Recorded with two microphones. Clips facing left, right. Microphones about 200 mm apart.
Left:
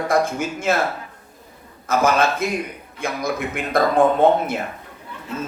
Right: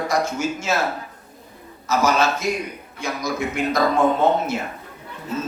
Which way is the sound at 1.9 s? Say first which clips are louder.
Left 1 dB; 55° left (ahead or behind).